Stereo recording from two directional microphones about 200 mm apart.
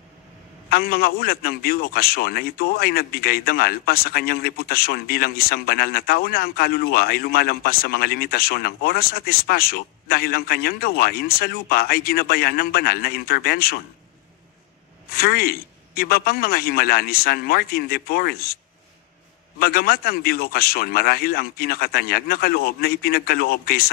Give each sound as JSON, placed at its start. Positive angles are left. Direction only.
{"t": 0.7, "sound": "a man's voice", "side_deg": 50}
{"t": 15.0, "sound": "a man's voice", "side_deg": 50}
{"t": 19.6, "sound": "a man's voice", "side_deg": 50}